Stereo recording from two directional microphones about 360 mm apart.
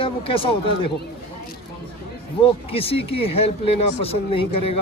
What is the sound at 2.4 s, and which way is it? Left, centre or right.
Speech, centre.